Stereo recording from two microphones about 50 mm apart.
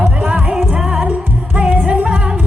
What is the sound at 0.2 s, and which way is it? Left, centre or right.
Music, right.